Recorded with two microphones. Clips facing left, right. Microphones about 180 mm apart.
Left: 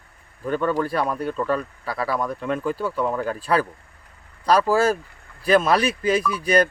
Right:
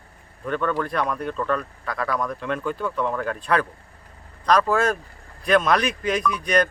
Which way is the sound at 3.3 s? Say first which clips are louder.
Left 1 dB; 35° left (ahead or behind).